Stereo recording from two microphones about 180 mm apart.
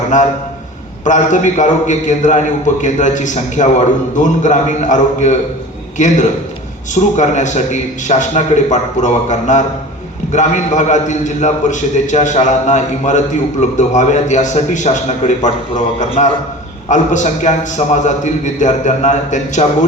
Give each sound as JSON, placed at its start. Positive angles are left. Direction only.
{"t": 1.0, "sound": "a man's voice", "side_deg": 45}